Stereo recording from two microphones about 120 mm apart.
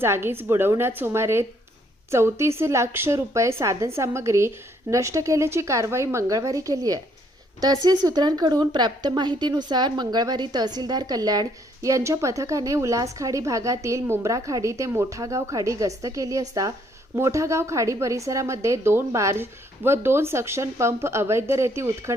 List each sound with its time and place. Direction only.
0.0 s a woman's voice: 20° right (ahead or behind)